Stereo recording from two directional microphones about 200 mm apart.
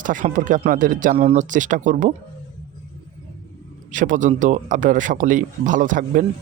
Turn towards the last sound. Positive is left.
turn(degrees=-40)  # may be behind; listen again after turning